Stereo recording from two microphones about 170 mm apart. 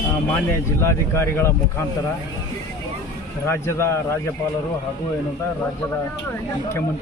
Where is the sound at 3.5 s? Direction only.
15° left (ahead or behind).